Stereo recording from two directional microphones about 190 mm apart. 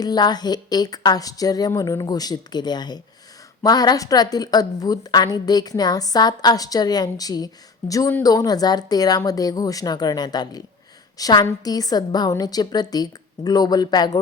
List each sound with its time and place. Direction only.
0.0 s a woman's voice: 20° left (ahead or behind)